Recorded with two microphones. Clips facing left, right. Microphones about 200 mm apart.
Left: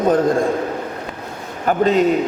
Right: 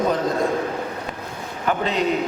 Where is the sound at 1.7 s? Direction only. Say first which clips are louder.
Left 7 dB; 45° left (ahead or behind).